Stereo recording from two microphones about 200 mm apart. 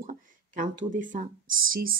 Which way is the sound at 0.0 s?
40° right (ahead or behind).